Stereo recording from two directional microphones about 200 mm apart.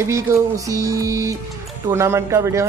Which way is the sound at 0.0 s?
15° right (ahead or behind).